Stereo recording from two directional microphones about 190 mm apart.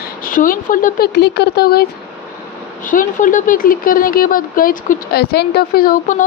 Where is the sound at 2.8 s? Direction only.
45° left (ahead or behind).